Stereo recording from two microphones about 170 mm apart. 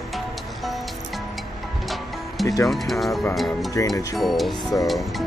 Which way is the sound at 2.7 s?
Centre (ahead or behind).